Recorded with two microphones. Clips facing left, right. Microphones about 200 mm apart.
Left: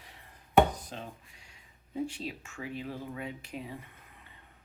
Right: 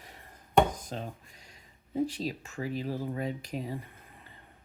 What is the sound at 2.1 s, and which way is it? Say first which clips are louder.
Speech: right 5 dB; 40° right (ahead or behind).